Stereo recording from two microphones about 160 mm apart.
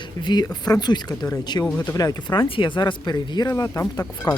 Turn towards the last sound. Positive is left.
turn(degrees=20)  # may be behind; listen again after turning